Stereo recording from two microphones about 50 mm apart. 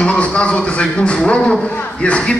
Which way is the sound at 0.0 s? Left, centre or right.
Left.